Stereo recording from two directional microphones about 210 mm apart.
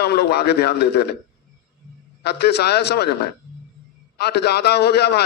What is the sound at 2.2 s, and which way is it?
A man's voice, 50° left (ahead or behind).